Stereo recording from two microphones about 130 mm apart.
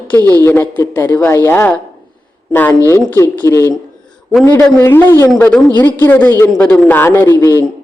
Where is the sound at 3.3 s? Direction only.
15° left (ahead or behind).